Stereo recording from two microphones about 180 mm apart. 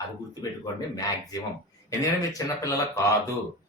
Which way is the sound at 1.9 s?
15° left (ahead or behind).